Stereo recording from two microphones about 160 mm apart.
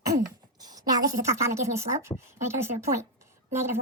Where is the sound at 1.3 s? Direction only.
20° right (ahead or behind).